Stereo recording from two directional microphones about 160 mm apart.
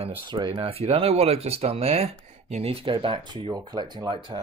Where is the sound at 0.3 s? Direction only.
30° right (ahead or behind).